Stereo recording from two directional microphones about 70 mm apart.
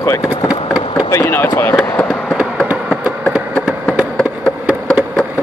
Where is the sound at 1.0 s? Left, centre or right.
Left.